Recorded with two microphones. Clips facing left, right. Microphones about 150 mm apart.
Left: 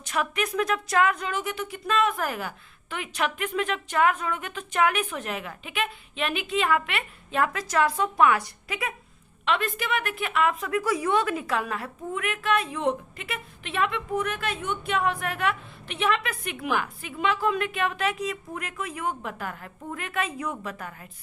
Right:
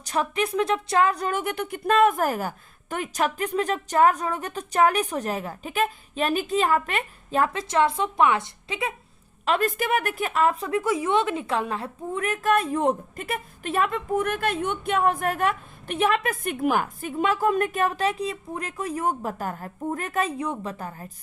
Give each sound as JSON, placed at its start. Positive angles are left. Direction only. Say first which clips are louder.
{"t": 0.0, "sound": "speech", "louder": "right 3 dB", "side_deg": -30}
{"t": 9.5, "sound": "a woman's voice", "louder": "right 4 dB", "side_deg": -45}